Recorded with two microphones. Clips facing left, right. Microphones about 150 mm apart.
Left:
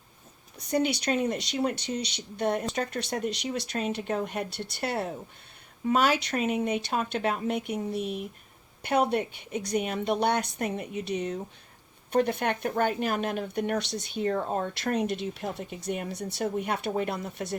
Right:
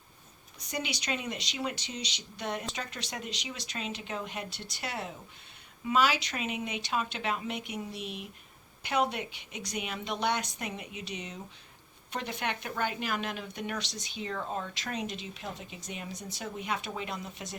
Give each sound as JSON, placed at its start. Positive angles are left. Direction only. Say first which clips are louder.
{"t": 0.7, "sound": "speech", "louder": "left 9 dB", "side_deg": 55}
{"t": 14.7, "sound": "speech", "louder": "left 8 dB", "side_deg": 60}